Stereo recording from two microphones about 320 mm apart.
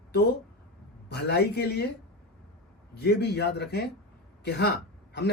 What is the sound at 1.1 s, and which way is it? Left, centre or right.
Speech, left.